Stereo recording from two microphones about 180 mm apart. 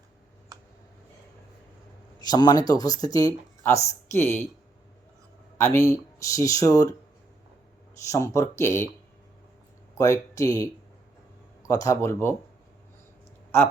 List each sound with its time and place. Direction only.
2.1 s speech: 20° left (ahead or behind)
5.5 s speech: 15° left (ahead or behind)
8.1 s speech: 15° left (ahead or behind)
10.0 s speech: 15° left (ahead or behind)
11.7 s speech: 20° left (ahead or behind)